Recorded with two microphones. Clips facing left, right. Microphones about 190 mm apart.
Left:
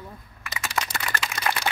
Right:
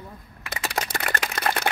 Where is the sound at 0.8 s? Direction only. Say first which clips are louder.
Even; 35° right (ahead or behind).